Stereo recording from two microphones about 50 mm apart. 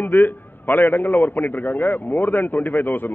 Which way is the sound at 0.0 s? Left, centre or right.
Left.